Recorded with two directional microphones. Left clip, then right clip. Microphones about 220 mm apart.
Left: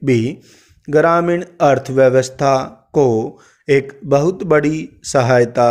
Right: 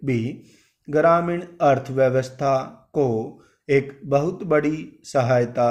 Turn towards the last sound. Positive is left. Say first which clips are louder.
# left 7 dB
turn(degrees=45)  # may be behind; listen again after turning